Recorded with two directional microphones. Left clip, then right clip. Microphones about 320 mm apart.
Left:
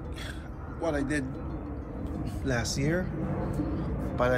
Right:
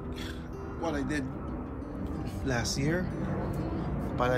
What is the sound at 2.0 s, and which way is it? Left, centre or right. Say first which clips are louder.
Music: left 1 dB; centre.